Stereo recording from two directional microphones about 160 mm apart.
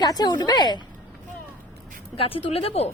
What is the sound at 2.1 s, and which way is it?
Speech, 35° left (ahead or behind).